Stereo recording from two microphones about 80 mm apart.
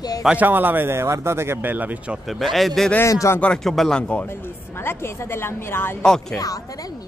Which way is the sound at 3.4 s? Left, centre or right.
Centre.